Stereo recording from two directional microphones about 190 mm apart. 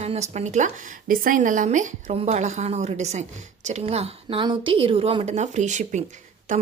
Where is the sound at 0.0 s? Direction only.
35° right (ahead or behind).